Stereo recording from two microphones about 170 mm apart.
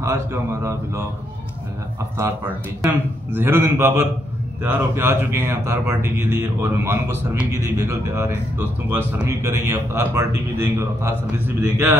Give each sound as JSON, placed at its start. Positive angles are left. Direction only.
{"t": 0.0, "sound": "speech", "side_deg": -15}
{"t": 2.1, "sound": "speech", "side_deg": -15}